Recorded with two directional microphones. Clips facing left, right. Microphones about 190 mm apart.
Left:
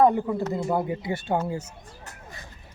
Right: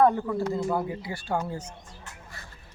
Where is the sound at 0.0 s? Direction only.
15° left (ahead or behind).